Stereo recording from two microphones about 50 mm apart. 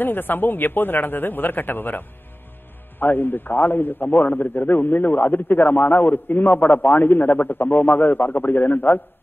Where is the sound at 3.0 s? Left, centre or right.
Left.